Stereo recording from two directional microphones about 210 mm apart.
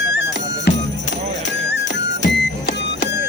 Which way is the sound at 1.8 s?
55° left (ahead or behind).